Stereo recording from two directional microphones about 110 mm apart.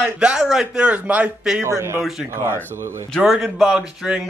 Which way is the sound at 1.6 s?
25° right (ahead or behind).